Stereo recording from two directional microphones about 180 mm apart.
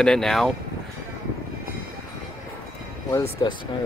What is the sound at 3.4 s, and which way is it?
Speech, 25° left (ahead or behind).